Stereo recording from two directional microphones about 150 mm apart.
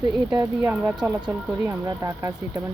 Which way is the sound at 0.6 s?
15° right (ahead or behind).